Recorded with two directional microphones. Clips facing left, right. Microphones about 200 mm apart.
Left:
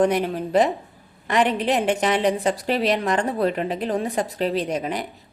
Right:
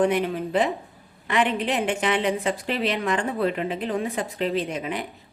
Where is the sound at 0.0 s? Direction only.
40° left (ahead or behind).